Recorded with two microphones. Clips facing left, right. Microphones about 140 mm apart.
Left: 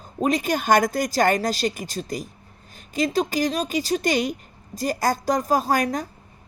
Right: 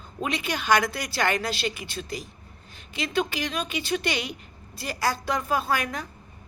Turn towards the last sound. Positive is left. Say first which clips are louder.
# left 5 dB
turn(degrees=40)  # may be behind; listen again after turning